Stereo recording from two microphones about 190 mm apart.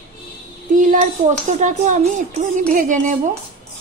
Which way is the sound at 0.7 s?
45° right (ahead or behind).